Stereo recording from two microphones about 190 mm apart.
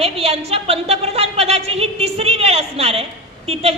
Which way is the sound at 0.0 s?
30° right (ahead or behind).